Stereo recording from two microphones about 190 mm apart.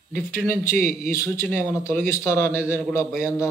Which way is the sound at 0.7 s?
40° right (ahead or behind).